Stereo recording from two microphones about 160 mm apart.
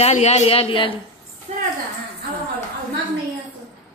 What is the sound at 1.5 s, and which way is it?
Speech, 45° right (ahead or behind).